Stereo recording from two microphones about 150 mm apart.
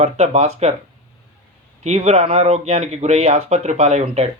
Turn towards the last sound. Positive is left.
turn(degrees=-45)  # may be behind; listen again after turning